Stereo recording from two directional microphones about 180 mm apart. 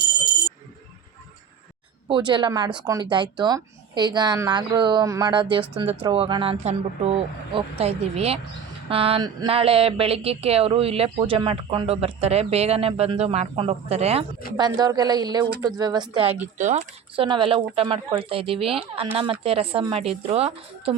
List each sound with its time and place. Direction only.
2.0 s speech: 25° right (ahead or behind)
14.5 s speech: 20° right (ahead or behind)
16.6 s speech: 45° right (ahead or behind)
17.2 s speech: 25° right (ahead or behind)